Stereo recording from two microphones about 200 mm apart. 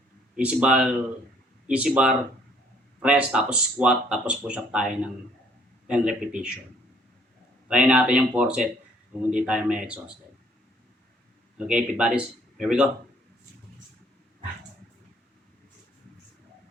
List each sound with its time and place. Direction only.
0.3 s speech: 5° right (ahead or behind)
7.7 s speech: 5° right (ahead or behind)
11.5 s speech: 5° right (ahead or behind)